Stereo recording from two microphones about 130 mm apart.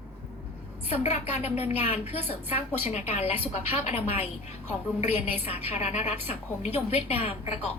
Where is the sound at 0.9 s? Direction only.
60° left (ahead or behind).